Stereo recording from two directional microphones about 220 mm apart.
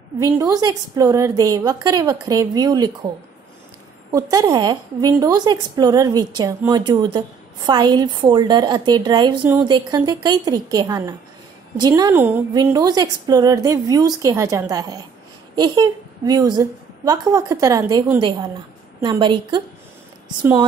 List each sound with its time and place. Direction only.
0.2 s a woman's voice: 15° right (ahead or behind)
4.1 s a woman's voice: 15° right (ahead or behind)